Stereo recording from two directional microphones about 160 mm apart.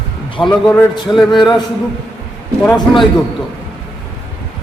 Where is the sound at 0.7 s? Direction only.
5° left (ahead or behind).